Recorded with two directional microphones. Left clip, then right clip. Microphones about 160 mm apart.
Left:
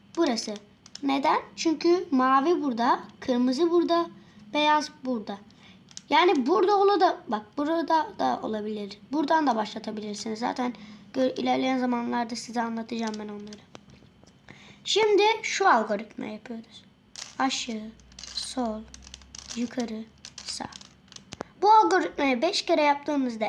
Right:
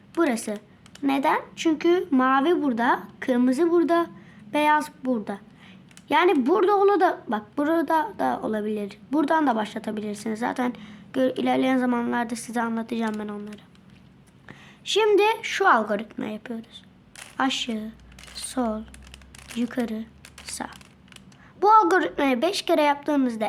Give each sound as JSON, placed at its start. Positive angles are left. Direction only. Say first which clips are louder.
{"t": 0.1, "sound": "a woman's voice", "louder": "right 2 dB", "side_deg": -20}
{"t": 14.9, "sound": "speech", "louder": "right 2 dB", "side_deg": -15}
{"t": 18.3, "sound": "a sound", "louder": "right 3 dB", "side_deg": -20}
{"t": 19.5, "sound": "speech", "louder": "right 4 dB", "side_deg": -15}